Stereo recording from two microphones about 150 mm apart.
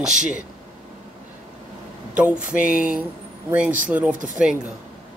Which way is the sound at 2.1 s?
10° right (ahead or behind).